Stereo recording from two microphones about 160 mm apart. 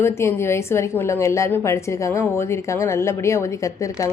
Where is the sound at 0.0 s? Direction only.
15° left (ahead or behind).